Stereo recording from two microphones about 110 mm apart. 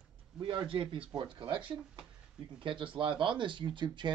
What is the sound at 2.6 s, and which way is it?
Speech, 50° right (ahead or behind).